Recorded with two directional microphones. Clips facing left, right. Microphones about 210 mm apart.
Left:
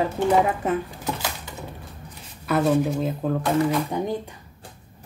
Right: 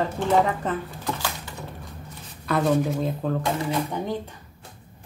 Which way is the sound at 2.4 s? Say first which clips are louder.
Left 2 dB; 5° left (ahead or behind).